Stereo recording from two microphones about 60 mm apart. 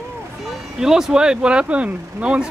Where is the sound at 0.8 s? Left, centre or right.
Centre.